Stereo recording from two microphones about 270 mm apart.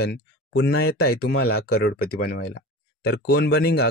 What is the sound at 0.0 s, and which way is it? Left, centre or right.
Speech, left.